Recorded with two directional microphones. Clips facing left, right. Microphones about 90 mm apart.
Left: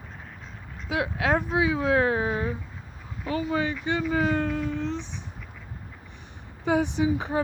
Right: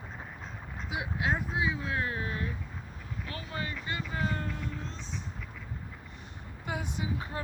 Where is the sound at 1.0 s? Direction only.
90° left.